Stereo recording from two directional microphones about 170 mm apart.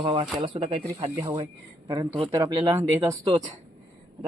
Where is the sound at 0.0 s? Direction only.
25° right (ahead or behind).